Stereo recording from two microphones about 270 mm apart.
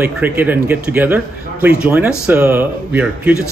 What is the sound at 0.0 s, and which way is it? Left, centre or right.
A man's voice, centre.